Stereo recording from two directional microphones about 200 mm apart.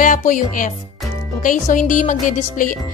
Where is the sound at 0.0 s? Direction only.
40° left (ahead or behind).